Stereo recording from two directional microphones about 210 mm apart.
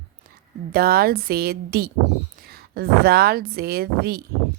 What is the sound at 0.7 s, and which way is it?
Speech, 45° right (ahead or behind).